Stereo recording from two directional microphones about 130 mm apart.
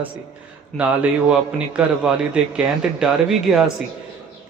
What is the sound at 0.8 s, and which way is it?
A man's voice, 10° right (ahead or behind).